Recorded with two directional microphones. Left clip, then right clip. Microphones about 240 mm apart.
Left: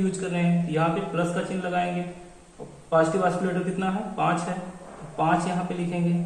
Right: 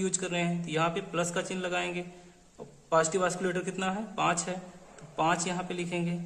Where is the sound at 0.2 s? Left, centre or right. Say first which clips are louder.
Left 4 dB; right.